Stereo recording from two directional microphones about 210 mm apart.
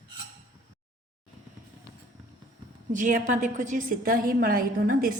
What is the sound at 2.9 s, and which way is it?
A woman's voice, 40° right (ahead or behind).